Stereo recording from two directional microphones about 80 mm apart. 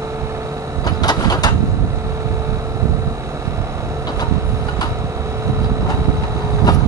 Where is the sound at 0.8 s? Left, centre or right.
Left.